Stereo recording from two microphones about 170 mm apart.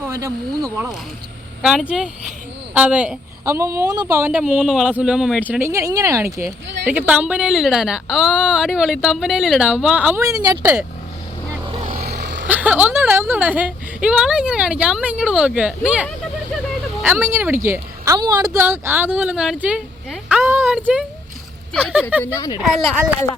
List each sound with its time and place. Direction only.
0.1 s a woman's voice: 15° right (ahead or behind)
1.9 s a woman's voice: 5° right (ahead or behind)
5.5 s a woman's voice: 15° right (ahead or behind)
11.8 s vehicle: 60° right (ahead or behind); by 12.5 s 85° right
12.5 s a woman's voice: 10° right (ahead or behind)
22.2 s speech: 15° left (ahead or behind)